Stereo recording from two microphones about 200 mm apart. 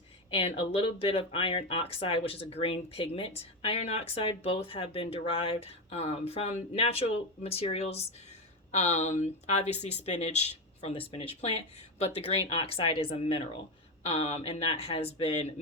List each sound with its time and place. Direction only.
0.3 s speech: 30° left (ahead or behind)